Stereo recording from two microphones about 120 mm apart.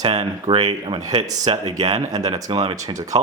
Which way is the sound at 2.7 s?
30° right (ahead or behind).